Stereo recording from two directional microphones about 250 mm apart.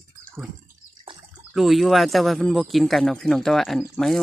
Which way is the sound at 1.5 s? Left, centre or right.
Centre.